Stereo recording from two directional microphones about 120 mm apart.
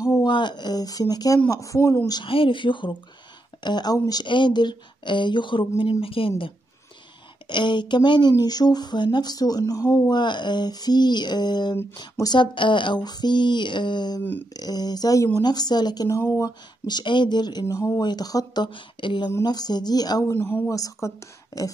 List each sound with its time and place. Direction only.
0.0 s a sound: 30° left (ahead or behind)
0.3 s speech: 40° left (ahead or behind); by 2.1 s 25° left (ahead or behind)
2.1 s speech: 50° left (ahead or behind)
16.2 s speech: 25° left (ahead or behind)
16.8 s speech: 40° left (ahead or behind)
20.3 s speech: 20° left (ahead or behind)